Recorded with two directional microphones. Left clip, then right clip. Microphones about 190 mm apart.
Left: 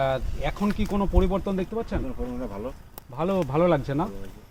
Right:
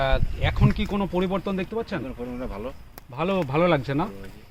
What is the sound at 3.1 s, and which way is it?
Speech, 30° right (ahead or behind).